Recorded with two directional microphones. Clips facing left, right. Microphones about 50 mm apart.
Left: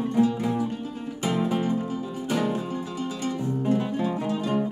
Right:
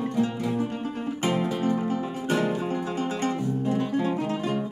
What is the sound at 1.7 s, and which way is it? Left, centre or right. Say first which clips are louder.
Music: right 2 dB; right.